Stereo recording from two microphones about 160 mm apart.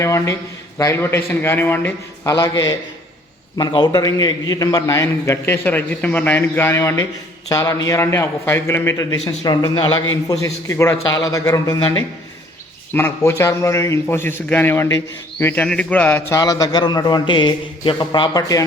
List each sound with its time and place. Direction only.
0.0 s a man's voice: 20° left (ahead or behind)
12.9 s a man's voice: 15° left (ahead or behind)
16.4 s a man's voice: 25° left (ahead or behind)